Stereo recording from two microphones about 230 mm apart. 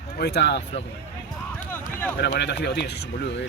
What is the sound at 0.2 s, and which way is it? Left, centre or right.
Speech, left.